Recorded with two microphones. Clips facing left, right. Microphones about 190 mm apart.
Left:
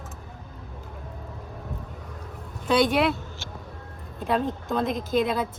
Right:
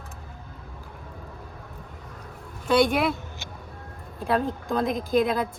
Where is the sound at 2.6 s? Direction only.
Centre (ahead or behind).